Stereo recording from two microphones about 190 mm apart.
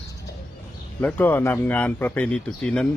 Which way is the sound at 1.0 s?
10° left (ahead or behind).